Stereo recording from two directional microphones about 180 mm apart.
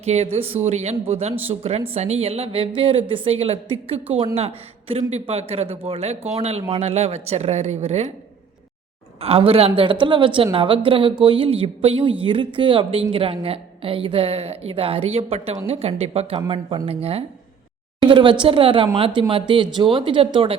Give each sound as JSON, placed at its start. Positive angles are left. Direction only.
{"t": 0.0, "sound": "a man's voice", "side_deg": -35}
{"t": 9.2, "sound": "a woman's voice", "side_deg": -30}